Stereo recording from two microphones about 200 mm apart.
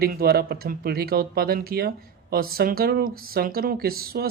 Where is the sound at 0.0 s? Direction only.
50° right (ahead or behind).